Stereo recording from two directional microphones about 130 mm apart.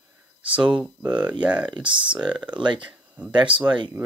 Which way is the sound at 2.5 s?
35° right (ahead or behind).